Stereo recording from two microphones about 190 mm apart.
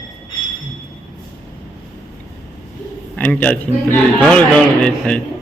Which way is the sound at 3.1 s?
5° left (ahead or behind).